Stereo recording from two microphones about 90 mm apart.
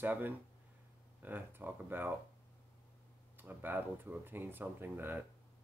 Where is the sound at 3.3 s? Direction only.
20° right (ahead or behind).